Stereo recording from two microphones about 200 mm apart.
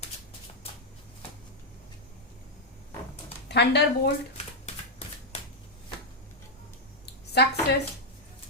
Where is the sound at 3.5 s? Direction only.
55° left (ahead or behind).